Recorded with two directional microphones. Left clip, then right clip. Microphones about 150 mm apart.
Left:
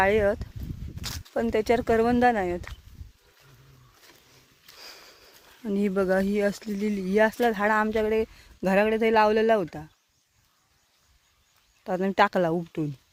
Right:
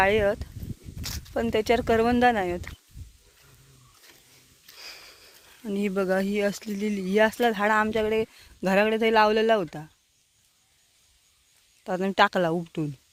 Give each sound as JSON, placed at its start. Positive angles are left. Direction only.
{"t": 0.0, "sound": "speech", "side_deg": 10}
{"t": 4.8, "sound": "sniff", "side_deg": 30}
{"t": 5.6, "sound": "speech", "side_deg": 25}
{"t": 11.8, "sound": "speech", "side_deg": 10}